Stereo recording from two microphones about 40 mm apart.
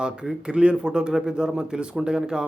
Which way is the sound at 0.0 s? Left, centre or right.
Right.